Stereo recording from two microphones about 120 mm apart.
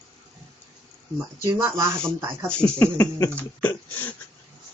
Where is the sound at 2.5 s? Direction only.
10° left (ahead or behind).